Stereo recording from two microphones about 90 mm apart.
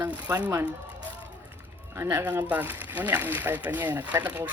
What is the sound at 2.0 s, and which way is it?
Speech, 30° right (ahead or behind).